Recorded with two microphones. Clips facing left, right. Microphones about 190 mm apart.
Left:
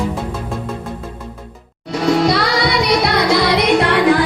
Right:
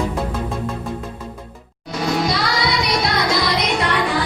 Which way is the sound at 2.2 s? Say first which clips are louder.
Left 5 dB; 65° left (ahead or behind).